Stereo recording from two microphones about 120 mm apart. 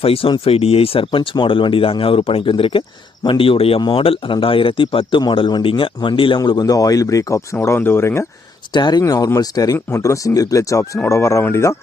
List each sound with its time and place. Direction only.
0.0 s speech: 50° left (ahead or behind); by 8.3 s 20° left (ahead or behind)
8.7 s speech: 35° left (ahead or behind)